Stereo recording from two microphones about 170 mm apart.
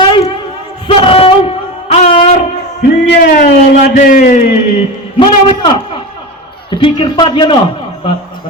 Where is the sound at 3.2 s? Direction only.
55° left (ahead or behind).